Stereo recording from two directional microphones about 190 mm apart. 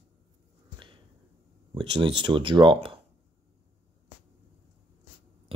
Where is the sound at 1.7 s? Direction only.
25° right (ahead or behind).